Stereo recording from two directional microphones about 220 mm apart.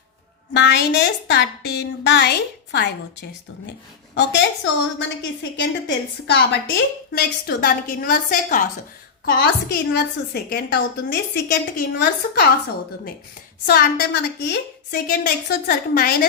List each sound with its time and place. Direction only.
0.5 s a woman's voice: 55° left (ahead or behind)
13.7 s a woman's voice: 45° left (ahead or behind)